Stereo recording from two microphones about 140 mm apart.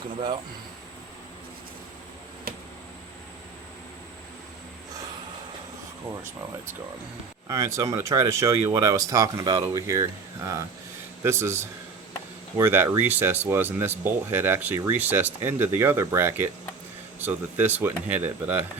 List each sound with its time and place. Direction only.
7.4 s speech: 20° right (ahead or behind)
11.2 s speech: 20° right (ahead or behind)